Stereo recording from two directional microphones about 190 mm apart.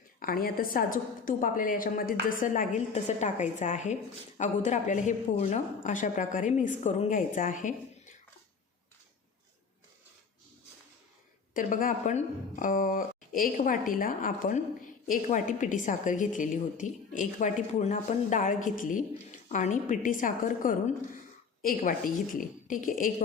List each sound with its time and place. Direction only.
0.2 s a woman's voice: 50° left (ahead or behind)
11.5 s a woman's voice: 45° left (ahead or behind)